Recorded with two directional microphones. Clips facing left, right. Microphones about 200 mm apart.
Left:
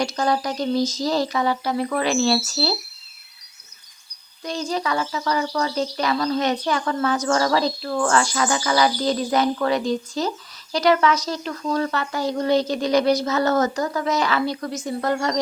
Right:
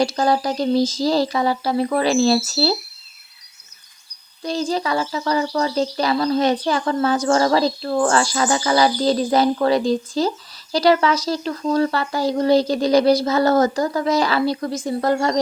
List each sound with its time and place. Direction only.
0.0 s speech: 30° right (ahead or behind)
4.4 s speech: 30° right (ahead or behind)